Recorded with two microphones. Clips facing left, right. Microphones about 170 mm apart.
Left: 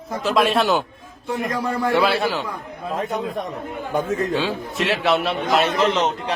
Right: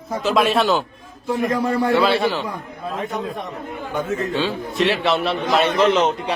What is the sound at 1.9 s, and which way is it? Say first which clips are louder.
Speech: left 1 dB; 5° left (ahead or behind).